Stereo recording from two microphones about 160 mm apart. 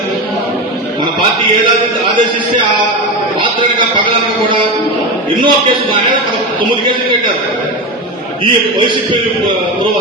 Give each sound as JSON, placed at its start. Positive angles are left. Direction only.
{"t": 3.4, "sound": "a man's voice", "side_deg": -30}